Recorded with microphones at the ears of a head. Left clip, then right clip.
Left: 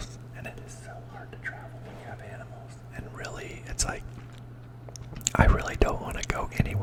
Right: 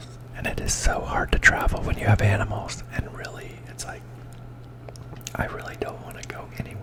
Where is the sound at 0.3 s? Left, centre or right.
Right.